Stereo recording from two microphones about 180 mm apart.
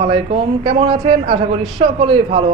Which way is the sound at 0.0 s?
35° right (ahead or behind).